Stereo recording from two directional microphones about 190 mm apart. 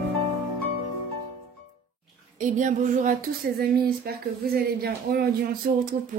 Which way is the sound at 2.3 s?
40° right (ahead or behind).